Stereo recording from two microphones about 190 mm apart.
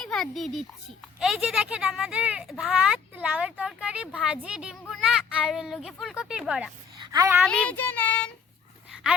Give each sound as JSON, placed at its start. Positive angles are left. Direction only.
{"t": 0.0, "sound": "speech", "side_deg": 5}
{"t": 7.0, "sound": "a sound", "side_deg": -20}
{"t": 7.4, "sound": "a child's voice", "side_deg": 5}